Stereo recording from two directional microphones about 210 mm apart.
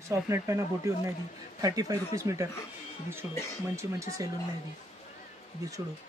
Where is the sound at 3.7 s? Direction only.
15° right (ahead or behind).